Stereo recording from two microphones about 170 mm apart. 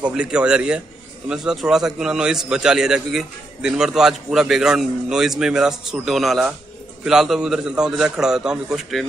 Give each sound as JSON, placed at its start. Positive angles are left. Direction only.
{"t": 0.0, "sound": "a man's voice", "side_deg": -5}